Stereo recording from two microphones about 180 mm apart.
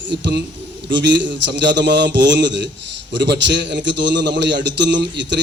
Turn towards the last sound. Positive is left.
turn(degrees=-75)  # may be behind; listen again after turning